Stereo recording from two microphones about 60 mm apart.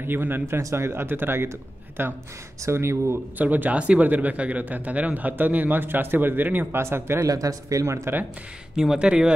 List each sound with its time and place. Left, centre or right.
0.0 s speech: right
0.6 s speech: right
3.3 s speech: right
6.8 s speech: right
7.2 s speech: right
7.8 s speech: right
8.7 s speech: centre